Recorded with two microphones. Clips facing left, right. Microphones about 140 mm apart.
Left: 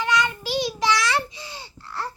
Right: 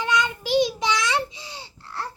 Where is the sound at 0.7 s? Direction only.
20° right (ahead or behind).